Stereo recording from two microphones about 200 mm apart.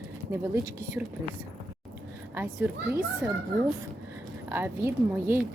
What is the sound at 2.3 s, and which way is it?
Speech, 10° right (ahead or behind).